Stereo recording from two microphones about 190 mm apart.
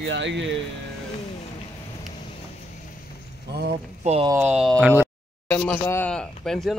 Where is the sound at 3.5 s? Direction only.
60° right (ahead or behind).